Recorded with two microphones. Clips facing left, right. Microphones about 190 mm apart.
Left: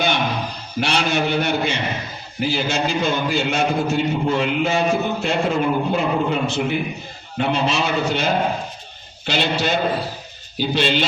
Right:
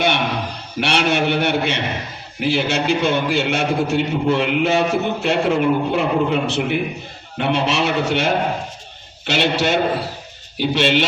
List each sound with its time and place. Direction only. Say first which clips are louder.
0.8 s a man's voice: right 2 dB; 70° right (ahead or behind)